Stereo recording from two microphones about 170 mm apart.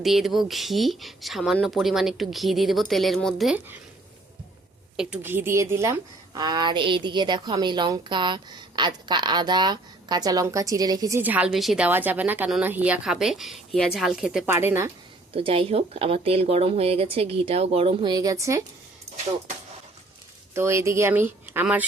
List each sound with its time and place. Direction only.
0.0 s speech: centre (ahead or behind)
4.9 s a woman's voice: 10° right (ahead or behind)
11.2 s speech: 10° right (ahead or behind)
14.4 s speech: 15° right (ahead or behind)
15.3 s speech: 35° right (ahead or behind); by 18.6 s 20° right (ahead or behind)
20.5 s speech: 15° right (ahead or behind)